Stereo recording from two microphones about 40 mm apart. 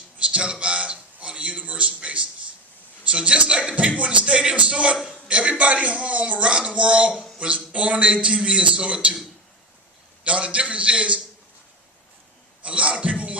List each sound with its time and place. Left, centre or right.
0.2 s speech: right
0.6 s a sound: right
3.0 s a man's voice: right
10.2 s a man's voice: right
12.6 s music: right